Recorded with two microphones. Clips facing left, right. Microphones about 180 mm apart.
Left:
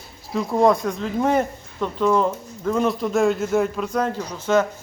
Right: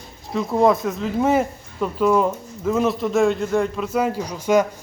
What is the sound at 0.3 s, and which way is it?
Speech, centre (ahead or behind).